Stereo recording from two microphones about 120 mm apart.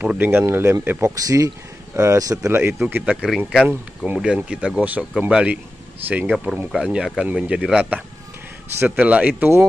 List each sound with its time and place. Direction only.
0.0 s speech: 15° right (ahead or behind)
1.1 s speech: 30° right (ahead or behind)
3.2 s speech: 5° right (ahead or behind); by 9.7 s 20° right (ahead or behind)